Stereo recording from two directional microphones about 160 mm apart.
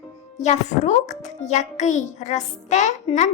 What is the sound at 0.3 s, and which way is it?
A child's voice, 45° left (ahead or behind).